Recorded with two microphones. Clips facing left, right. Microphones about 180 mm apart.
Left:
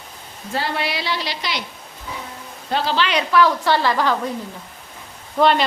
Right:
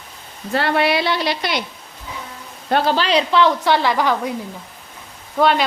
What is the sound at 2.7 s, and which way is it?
Speech, 50° right (ahead or behind).